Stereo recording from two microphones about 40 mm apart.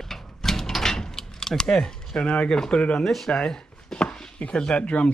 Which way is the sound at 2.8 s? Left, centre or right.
Left.